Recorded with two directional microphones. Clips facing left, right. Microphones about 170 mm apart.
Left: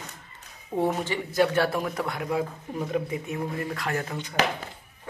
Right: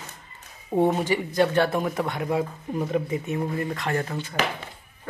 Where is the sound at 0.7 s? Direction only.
20° right (ahead or behind).